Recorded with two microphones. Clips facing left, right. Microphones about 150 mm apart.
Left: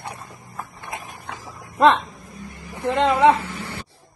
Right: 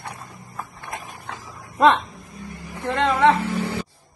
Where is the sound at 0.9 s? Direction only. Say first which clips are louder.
Even; 15° left (ahead or behind).